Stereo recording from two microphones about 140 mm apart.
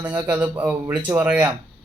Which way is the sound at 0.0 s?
10° right (ahead or behind).